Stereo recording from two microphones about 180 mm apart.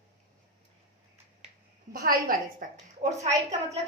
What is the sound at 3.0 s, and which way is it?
Speech, 35° right (ahead or behind).